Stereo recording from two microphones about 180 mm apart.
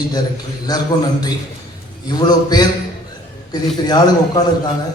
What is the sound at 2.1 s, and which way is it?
Speech, 20° left (ahead or behind).